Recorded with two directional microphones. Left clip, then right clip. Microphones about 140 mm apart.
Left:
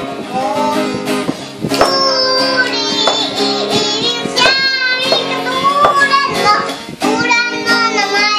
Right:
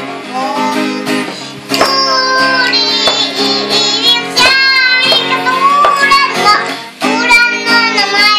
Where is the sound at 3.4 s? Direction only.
20° left (ahead or behind).